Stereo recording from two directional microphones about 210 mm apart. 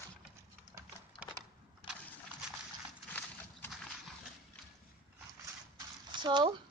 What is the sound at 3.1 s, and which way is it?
Horse, 10° left (ahead or behind).